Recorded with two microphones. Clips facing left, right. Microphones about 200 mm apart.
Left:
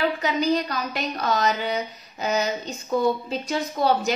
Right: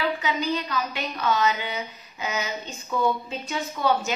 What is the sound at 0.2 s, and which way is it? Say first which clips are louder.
A woman's voice: left 4 dB; 40° left (ahead or behind).